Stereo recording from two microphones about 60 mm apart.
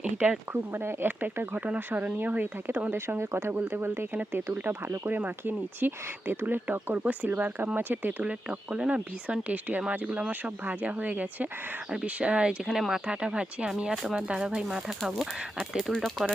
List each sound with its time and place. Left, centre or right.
0.0 s speech: right
0.5 s speech: right
8.2 s speech: centre
13.9 s speech: centre
14.2 s speech: centre
15.4 s speech: centre
16.2 s speech: centre